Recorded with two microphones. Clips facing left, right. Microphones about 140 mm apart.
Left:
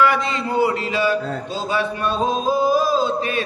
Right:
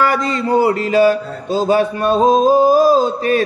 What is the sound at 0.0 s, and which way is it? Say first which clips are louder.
Speech: right 2 dB; 40° right (ahead or behind).